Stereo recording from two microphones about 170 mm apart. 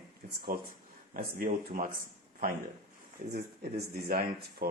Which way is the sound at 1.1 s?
55° right (ahead or behind).